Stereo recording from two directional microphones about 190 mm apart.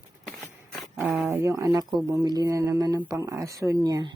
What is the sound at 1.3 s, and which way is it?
Speech, 15° right (ahead or behind).